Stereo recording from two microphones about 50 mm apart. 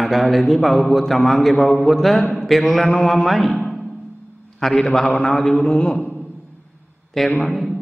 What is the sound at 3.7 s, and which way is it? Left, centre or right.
Music, centre.